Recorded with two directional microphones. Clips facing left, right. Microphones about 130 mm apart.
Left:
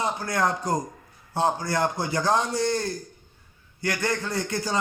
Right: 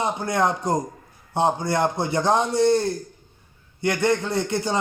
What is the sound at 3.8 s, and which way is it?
Speech, 25° right (ahead or behind).